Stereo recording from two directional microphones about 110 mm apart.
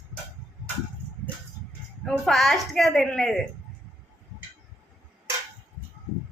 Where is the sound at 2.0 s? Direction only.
Centre (ahead or behind).